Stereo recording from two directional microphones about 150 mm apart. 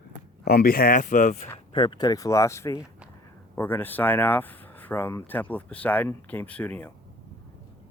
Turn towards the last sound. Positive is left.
turn(degrees=10)  # may be behind; listen again after turning